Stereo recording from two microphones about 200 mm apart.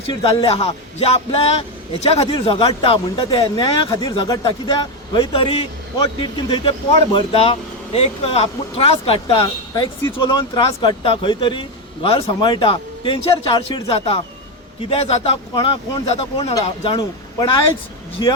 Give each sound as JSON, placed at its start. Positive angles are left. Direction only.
{"t": 0.1, "sound": "a man's voice", "side_deg": 25}